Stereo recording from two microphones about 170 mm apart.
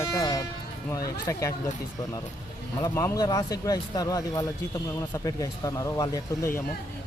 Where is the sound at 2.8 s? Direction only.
20° left (ahead or behind).